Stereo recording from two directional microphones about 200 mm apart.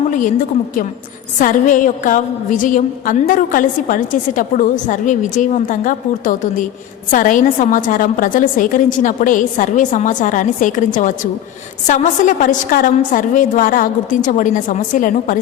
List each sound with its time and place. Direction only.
1.4 s a woman's voice: 40° left (ahead or behind)